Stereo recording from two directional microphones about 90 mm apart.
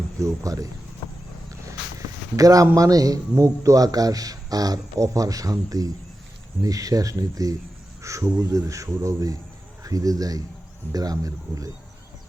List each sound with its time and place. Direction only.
0.2 s a man's voice: 40° right (ahead or behind)
2.3 s a man's voice: 40° right (ahead or behind)